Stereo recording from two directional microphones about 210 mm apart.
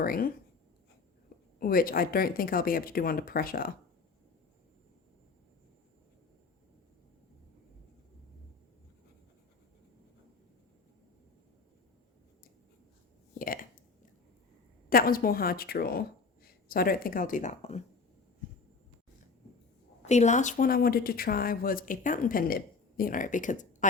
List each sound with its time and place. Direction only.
0.0 s speech: 45° left (ahead or behind)
1.5 s speech: 45° left (ahead or behind)
13.4 s a sound: 40° left (ahead or behind)
14.8 s speech: 45° left (ahead or behind)
20.1 s speech: 35° left (ahead or behind)